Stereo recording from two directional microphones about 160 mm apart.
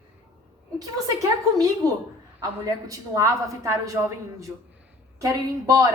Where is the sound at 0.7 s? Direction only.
20° right (ahead or behind).